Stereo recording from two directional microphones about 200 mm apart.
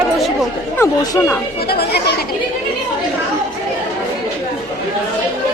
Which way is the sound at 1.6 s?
50° left (ahead or behind).